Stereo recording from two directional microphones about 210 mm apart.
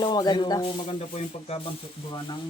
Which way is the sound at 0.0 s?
20° left (ahead or behind).